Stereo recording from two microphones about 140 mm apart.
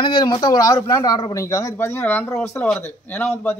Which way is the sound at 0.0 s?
35° left (ahead or behind).